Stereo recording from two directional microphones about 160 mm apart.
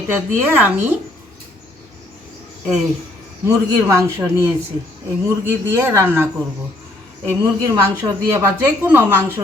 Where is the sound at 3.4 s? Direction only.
20° right (ahead or behind).